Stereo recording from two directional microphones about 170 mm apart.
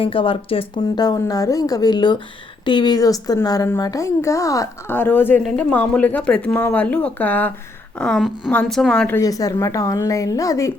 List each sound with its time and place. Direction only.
0.0 s a woman's voice: 30° left (ahead or behind)